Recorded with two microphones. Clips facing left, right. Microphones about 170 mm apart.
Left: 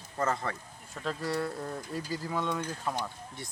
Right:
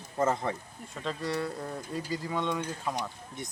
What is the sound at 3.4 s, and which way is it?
Speech, 20° right (ahead or behind).